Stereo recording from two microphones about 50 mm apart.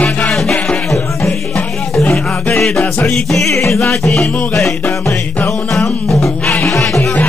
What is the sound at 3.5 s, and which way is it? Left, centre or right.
Music, left.